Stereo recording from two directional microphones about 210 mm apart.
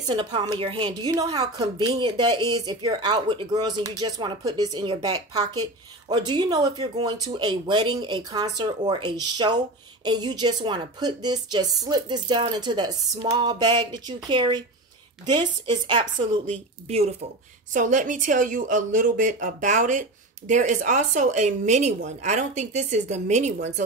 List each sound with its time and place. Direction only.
0.0 s a woman's voice: 20° right (ahead or behind)